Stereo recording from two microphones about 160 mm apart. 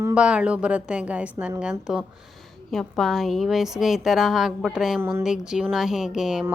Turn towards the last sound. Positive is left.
turn(degrees=-5)  # may be behind; listen again after turning